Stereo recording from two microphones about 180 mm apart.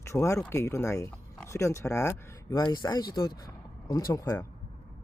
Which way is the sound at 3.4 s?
20° left (ahead or behind).